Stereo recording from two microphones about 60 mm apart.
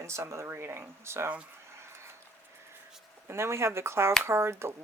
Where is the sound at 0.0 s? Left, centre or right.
Right.